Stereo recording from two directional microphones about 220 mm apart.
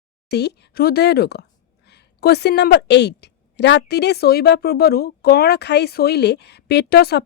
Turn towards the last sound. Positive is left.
turn(degrees=45)  # may be behind; listen again after turning